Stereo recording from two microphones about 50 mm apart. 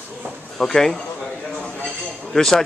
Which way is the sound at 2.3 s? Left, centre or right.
Centre.